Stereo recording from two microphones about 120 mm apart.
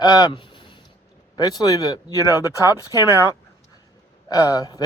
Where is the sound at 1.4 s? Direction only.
30° left (ahead or behind).